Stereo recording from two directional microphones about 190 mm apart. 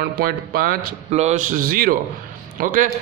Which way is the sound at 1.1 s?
35° right (ahead or behind).